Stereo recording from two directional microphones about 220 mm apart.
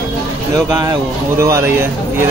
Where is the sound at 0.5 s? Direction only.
15° right (ahead or behind).